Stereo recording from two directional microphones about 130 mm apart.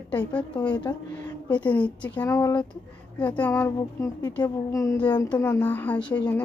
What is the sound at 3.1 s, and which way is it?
Speech, 10° left (ahead or behind).